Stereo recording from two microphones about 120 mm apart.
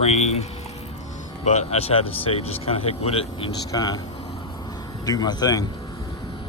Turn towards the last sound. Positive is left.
turn(degrees=35)  # may be behind; listen again after turning